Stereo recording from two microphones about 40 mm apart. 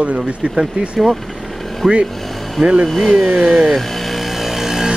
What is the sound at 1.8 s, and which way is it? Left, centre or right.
Speech, centre.